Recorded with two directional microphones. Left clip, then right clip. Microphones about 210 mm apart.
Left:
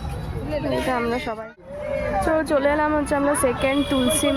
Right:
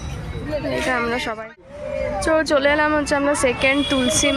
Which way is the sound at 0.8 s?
5° left (ahead or behind).